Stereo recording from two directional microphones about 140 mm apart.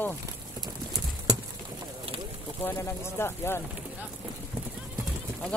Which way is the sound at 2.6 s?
15° left (ahead or behind).